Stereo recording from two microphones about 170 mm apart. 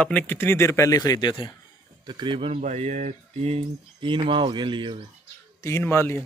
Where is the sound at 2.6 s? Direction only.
45° right (ahead or behind); by 5.0 s 30° right (ahead or behind).